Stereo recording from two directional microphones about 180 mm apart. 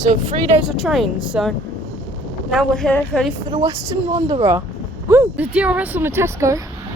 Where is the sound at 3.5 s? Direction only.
35° right (ahead or behind).